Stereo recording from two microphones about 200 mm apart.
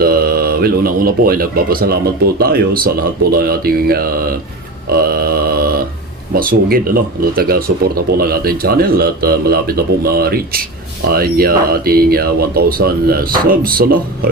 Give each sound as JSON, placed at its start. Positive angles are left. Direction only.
{"t": 0.0, "sound": "speech", "side_deg": -50}
{"t": 4.9, "sound": "a sound", "side_deg": -50}
{"t": 6.3, "sound": "speech", "side_deg": -45}